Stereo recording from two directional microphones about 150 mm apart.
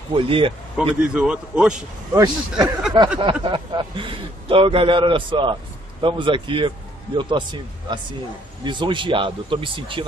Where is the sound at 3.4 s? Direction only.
30° right (ahead or behind).